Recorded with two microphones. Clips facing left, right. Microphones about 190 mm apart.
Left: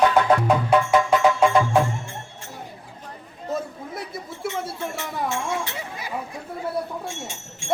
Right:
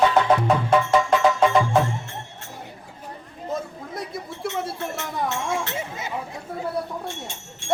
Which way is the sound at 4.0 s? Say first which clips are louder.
Right 3 dB; centre (ahead or behind).